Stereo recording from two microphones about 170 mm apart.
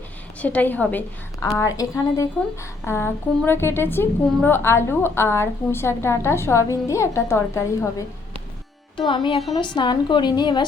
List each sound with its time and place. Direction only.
0.4 s a woman's voice: 10° left (ahead or behind)
9.0 s a woman's voice: 30° left (ahead or behind)